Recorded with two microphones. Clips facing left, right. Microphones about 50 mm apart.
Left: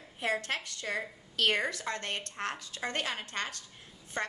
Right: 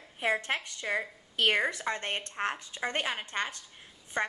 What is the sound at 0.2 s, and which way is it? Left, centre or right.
Speech, right.